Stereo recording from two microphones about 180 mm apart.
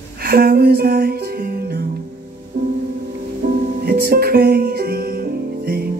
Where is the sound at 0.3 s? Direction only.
60° right (ahead or behind).